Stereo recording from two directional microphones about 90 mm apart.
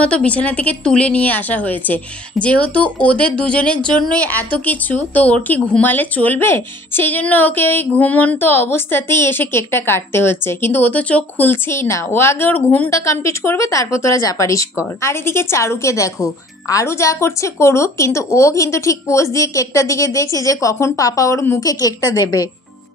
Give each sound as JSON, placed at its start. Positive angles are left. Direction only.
{"t": 0.0, "sound": "a woman's voice", "side_deg": 15}
{"t": 12.9, "sound": "a woman's voice", "side_deg": 35}